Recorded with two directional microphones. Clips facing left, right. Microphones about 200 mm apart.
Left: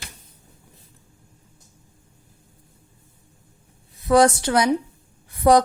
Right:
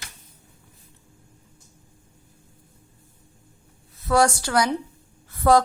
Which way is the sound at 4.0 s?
15° left (ahead or behind).